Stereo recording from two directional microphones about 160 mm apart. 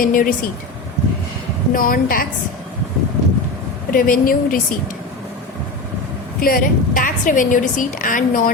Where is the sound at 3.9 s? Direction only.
60° left (ahead or behind).